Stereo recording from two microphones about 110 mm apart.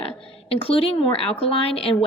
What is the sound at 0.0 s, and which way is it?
A woman's voice, 60° left (ahead or behind).